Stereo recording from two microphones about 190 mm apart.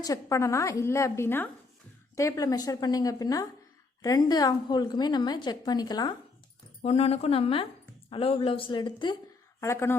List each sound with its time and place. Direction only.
0.0 s a woman's voice: 15° left (ahead or behind)
6.8 s a woman's voice: 30° left (ahead or behind); by 9.9 s 15° left (ahead or behind)